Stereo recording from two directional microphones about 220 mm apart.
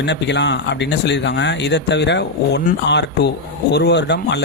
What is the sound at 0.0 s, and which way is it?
Speech, 50° left (ahead or behind).